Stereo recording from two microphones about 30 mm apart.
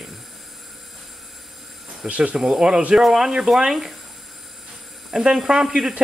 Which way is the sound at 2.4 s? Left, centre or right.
Centre.